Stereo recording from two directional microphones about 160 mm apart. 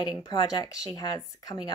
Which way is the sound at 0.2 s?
25° left (ahead or behind).